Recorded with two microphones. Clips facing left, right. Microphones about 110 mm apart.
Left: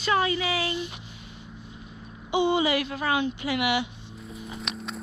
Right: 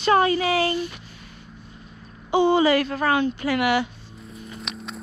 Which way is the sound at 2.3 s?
40° right (ahead or behind).